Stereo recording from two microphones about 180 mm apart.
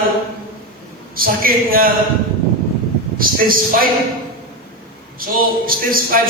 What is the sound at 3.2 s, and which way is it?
Speech, 50° right (ahead or behind).